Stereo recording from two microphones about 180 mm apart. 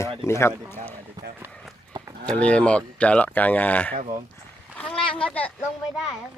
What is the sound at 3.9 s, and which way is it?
Speech, 40° right (ahead or behind).